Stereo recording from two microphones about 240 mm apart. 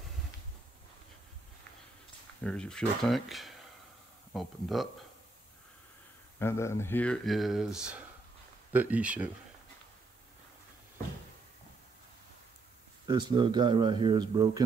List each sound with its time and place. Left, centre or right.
2.4 s speech: centre
6.4 s speech: centre
13.0 s speech: centre